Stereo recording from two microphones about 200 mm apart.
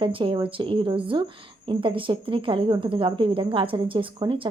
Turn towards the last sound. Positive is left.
turn(degrees=-25)  # may be behind; listen again after turning